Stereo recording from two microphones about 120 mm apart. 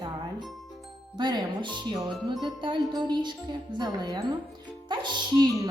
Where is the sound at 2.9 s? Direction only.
40° right (ahead or behind).